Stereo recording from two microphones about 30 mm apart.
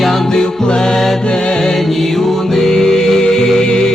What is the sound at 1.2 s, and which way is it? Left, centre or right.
Music, left.